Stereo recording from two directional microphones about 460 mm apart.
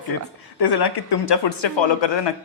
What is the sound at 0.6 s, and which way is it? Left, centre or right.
Speech, left.